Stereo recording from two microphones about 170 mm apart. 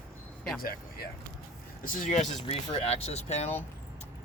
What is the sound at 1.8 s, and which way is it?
Speech, 50° left (ahead or behind).